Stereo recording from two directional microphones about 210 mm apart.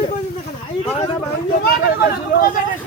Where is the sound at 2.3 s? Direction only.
45° left (ahead or behind).